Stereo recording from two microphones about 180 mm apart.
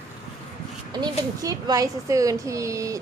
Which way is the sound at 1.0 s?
20° right (ahead or behind).